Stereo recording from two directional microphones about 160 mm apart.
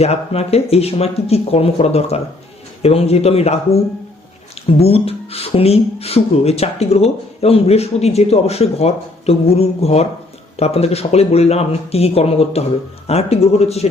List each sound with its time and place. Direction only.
0.0 s speech: 40° left (ahead or behind)
4.8 s speech: 40° left (ahead or behind)